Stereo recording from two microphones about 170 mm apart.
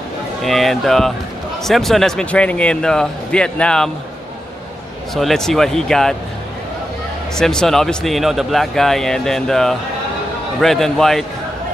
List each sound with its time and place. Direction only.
0.4 s a man's voice: centre (ahead or behind)
5.1 s a man's voice: centre (ahead or behind)
7.3 s a man's voice: 5° left (ahead or behind)